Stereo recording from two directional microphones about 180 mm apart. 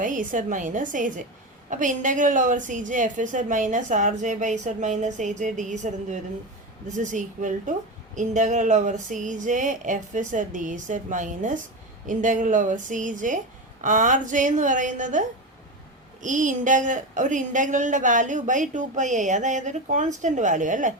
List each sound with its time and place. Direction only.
0.0 s a woman's voice: 45° right (ahead or behind)
16.2 s a woman's voice: 45° right (ahead or behind)